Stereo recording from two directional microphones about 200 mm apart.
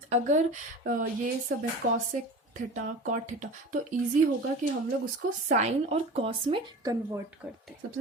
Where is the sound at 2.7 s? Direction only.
40° right (ahead or behind).